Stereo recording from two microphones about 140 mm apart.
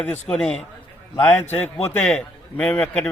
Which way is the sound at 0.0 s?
10° left (ahead or behind).